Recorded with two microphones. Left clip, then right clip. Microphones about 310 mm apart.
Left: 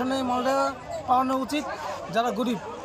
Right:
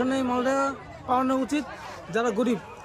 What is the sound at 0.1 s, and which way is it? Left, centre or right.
A man's voice, centre.